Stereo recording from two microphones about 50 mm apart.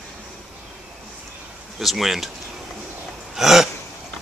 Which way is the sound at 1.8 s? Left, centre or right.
Centre.